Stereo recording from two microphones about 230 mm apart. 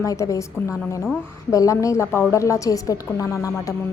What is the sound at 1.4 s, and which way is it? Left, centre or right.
A woman's voice, centre.